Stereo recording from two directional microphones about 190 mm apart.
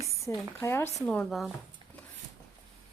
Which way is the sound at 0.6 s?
15° left (ahead or behind).